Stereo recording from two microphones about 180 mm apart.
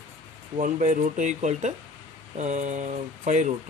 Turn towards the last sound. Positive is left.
turn(degrees=-40)  # may be behind; listen again after turning